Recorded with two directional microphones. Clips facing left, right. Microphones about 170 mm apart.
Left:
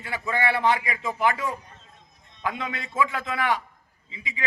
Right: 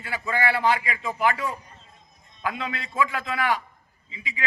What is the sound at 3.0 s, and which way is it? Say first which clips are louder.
A man's voice: even; 20° left (ahead or behind).